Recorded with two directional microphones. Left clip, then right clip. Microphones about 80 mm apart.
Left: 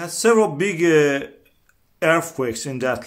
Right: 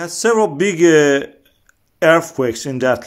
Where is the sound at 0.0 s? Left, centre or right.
Right.